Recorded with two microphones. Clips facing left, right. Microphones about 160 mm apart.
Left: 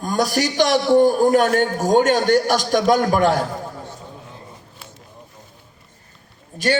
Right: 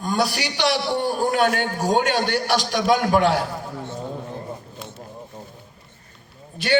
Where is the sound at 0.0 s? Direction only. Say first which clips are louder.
Left 3 dB; 45° left (ahead or behind).